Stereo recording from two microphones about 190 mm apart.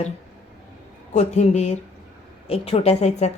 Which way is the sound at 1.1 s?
35° left (ahead or behind).